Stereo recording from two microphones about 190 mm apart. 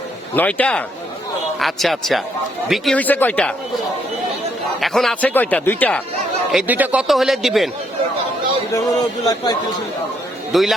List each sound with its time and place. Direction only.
0.3 s a man's voice: 10° left (ahead or behind)
4.8 s speech: centre (ahead or behind)
6.5 s a man's voice: 5° right (ahead or behind)
9.2 s a man's voice: 20° left (ahead or behind)
10.5 s a man's voice: centre (ahead or behind)